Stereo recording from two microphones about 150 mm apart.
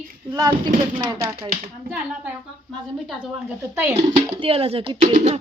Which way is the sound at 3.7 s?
15° right (ahead or behind).